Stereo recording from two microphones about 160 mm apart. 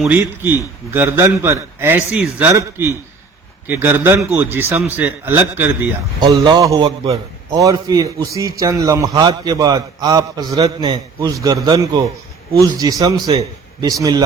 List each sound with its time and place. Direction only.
0.0 s a man's voice: 10° right (ahead or behind)
6.1 s a man's voice: 25° right (ahead or behind)